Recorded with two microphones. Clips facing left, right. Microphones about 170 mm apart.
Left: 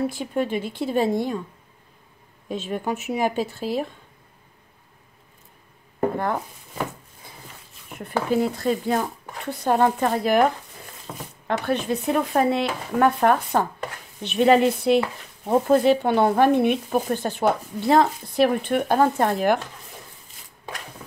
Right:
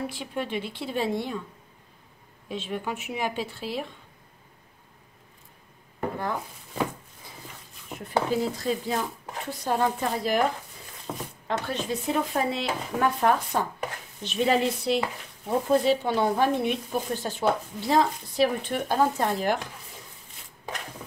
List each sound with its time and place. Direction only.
0.0 s speech: 45° left (ahead or behind)
2.4 s speech: 45° left (ahead or behind)
6.1 s speech: 55° left (ahead or behind)
8.4 s speech: 60° left (ahead or behind)
11.1 s speech: centre (ahead or behind)
11.4 s speech: 60° left (ahead or behind)